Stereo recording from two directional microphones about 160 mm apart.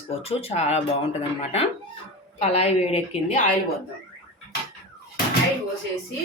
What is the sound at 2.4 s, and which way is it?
A woman's voice, 40° left (ahead or behind).